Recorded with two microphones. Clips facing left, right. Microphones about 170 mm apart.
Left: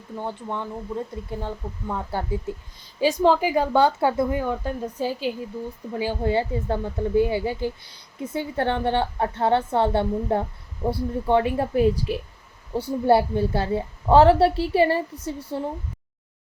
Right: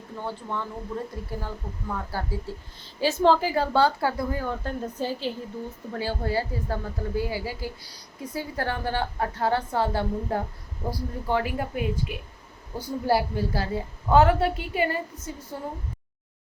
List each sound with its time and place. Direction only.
0.2 s a woman's voice: 20° left (ahead or behind)